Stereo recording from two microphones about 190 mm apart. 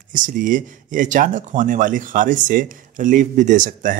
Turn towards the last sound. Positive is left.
turn(degrees=-45)  # may be behind; listen again after turning